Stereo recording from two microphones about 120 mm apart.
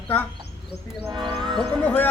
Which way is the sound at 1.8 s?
10° left (ahead or behind).